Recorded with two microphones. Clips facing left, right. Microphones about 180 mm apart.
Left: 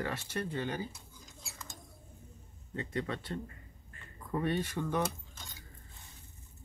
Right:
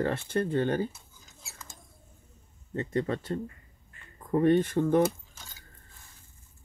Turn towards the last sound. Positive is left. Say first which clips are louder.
# even
turn(degrees=-5)  # may be behind; listen again after turning